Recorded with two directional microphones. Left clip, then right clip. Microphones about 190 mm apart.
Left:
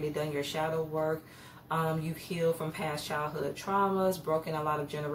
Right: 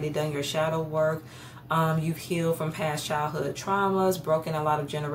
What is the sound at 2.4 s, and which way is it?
Speech, 35° right (ahead or behind).